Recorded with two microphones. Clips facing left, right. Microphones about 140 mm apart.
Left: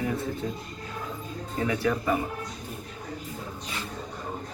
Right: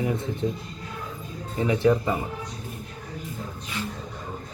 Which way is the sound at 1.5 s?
20° right (ahead or behind).